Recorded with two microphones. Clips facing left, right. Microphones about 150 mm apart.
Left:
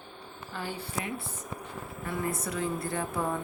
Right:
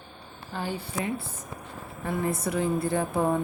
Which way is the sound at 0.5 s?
25° right (ahead or behind).